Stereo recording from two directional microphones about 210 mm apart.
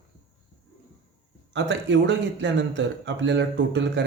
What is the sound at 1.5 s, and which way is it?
Speech, 60° right (ahead or behind).